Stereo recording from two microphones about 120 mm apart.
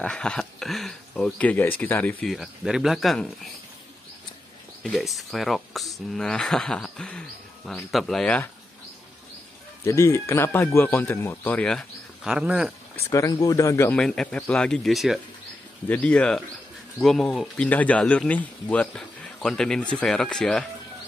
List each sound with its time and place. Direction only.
0.0 s speech: 5° left (ahead or behind)
2.2 s speech: centre (ahead or behind)
5.0 s speech: centre (ahead or behind)
9.8 s speech: 25° left (ahead or behind); by 12.7 s 5° right (ahead or behind)
13.1 s speech: 30° left (ahead or behind)
13.9 s speech: 5° left (ahead or behind)
15.9 s speech: 10° left (ahead or behind)